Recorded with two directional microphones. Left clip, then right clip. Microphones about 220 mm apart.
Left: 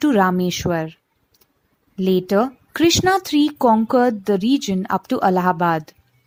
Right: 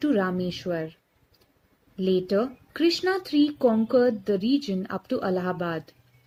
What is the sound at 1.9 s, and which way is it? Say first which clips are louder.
Speech: left 6 dB; 45° left (ahead or behind).